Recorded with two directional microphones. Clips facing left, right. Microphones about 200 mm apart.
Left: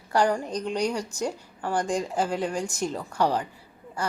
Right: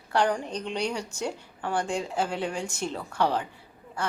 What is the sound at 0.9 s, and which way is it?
Speech, 10° right (ahead or behind).